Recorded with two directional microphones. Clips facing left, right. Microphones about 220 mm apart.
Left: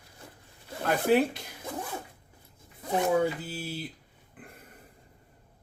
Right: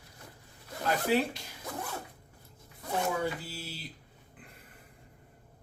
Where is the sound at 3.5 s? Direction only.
50° left (ahead or behind).